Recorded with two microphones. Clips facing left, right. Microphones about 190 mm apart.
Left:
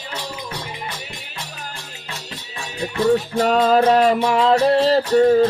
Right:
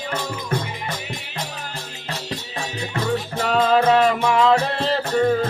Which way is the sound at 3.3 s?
40° left (ahead or behind).